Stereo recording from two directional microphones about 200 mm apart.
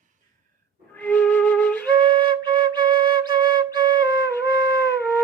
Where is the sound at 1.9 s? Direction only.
25° right (ahead or behind).